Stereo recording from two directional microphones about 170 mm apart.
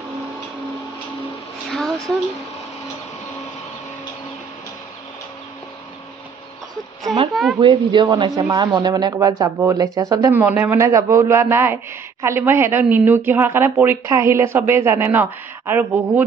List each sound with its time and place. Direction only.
1.7 s a sound: 5° left (ahead or behind)
7.1 s speech: centre (ahead or behind)
7.5 s a man's voice: 25° right (ahead or behind); by 16.3 s 10° right (ahead or behind)